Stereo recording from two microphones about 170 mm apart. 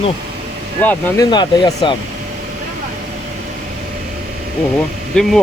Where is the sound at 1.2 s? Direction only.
25° left (ahead or behind).